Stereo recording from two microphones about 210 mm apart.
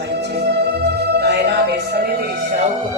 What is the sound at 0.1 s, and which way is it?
Music, 55° right (ahead or behind).